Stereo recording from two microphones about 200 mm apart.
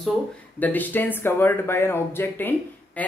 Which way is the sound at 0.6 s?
10° left (ahead or behind).